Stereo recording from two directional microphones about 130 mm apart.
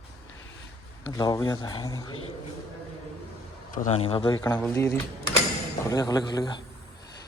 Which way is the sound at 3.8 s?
50° left (ahead or behind).